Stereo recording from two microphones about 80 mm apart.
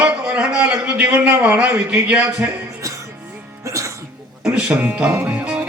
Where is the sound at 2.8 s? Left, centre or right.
Right.